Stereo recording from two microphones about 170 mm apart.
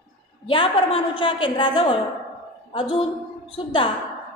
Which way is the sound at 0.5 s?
30° left (ahead or behind).